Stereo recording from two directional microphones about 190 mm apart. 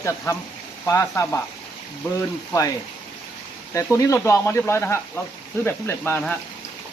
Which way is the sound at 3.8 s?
15° left (ahead or behind).